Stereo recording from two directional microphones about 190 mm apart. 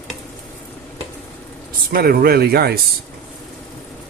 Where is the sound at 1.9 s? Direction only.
55° right (ahead or behind).